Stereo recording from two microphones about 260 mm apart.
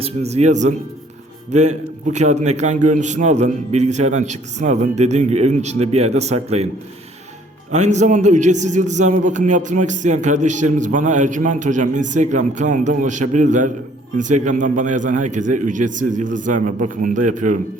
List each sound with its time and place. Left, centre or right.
0.0 s a man's voice: right
7.7 s a man's voice: right